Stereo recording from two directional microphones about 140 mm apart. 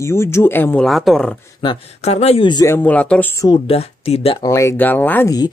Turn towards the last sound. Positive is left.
turn(degrees=15)  # may be behind; listen again after turning